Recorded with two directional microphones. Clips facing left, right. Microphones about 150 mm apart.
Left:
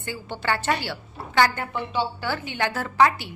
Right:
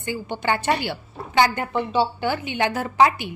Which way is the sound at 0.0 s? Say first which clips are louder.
Right 4 dB; 15° right (ahead or behind).